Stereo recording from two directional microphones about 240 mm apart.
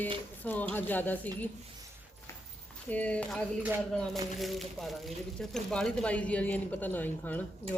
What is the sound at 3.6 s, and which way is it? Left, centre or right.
Speech, centre.